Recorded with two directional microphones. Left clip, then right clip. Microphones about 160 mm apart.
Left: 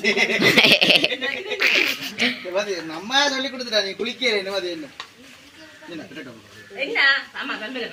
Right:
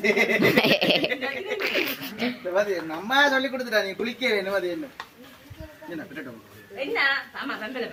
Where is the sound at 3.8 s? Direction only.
5° right (ahead or behind).